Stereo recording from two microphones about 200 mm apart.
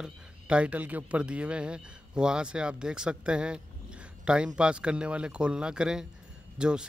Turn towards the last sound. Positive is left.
turn(degrees=-5)  # may be behind; listen again after turning